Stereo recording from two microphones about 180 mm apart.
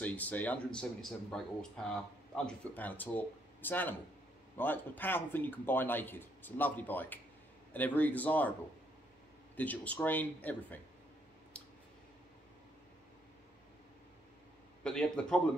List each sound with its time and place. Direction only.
0.0 s speech: 10° left (ahead or behind)
9.6 s speech: 10° left (ahead or behind)
14.8 s speech: 5° left (ahead or behind)